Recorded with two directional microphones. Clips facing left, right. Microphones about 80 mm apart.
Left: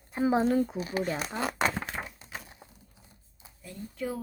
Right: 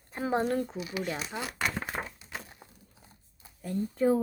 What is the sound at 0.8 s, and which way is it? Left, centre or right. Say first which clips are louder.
Speech: left 4 dB; left.